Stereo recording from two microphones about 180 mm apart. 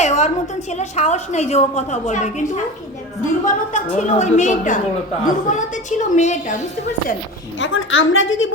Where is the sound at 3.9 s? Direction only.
40° left (ahead or behind).